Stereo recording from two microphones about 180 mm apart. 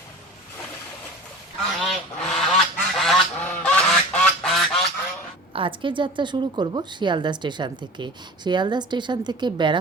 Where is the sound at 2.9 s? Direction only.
Centre (ahead or behind).